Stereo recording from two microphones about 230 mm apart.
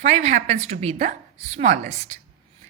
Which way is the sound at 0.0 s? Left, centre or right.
Right.